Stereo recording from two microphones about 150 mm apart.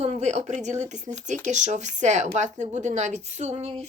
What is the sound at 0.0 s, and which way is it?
Speech, 50° right (ahead or behind).